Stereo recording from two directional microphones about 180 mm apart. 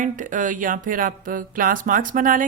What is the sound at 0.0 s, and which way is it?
Speech, 45° right (ahead or behind).